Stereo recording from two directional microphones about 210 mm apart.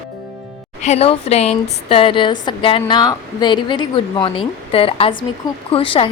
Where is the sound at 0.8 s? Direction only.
30° left (ahead or behind).